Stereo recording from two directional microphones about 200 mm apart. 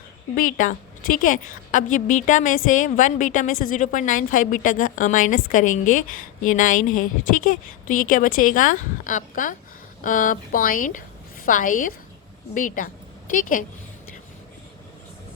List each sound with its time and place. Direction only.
0.3 s a woman's voice: 40° left (ahead or behind)